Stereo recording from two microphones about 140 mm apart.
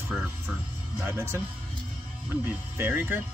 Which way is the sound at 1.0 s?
20° right (ahead or behind).